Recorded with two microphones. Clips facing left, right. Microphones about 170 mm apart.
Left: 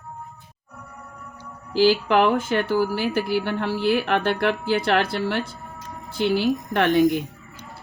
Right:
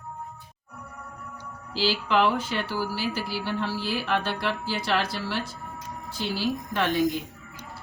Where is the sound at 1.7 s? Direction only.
50° left (ahead or behind).